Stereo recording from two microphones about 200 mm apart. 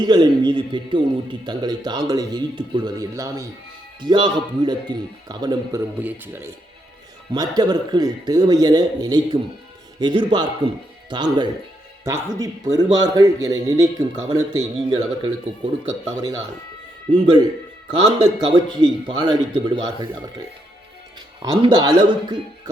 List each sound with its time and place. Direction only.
0.0 s a man's voice: 20° right (ahead or behind)
6.0 s a man's voice: 10° right (ahead or behind)
21.4 s a man's voice: 20° right (ahead or behind)